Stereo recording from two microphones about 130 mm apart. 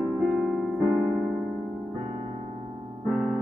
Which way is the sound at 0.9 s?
20° right (ahead or behind).